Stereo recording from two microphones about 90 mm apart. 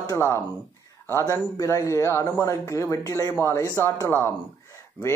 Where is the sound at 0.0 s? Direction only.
35° left (ahead or behind).